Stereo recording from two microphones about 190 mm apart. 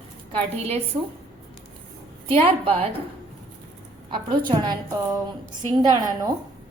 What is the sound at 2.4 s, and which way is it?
Speech, 30° right (ahead or behind).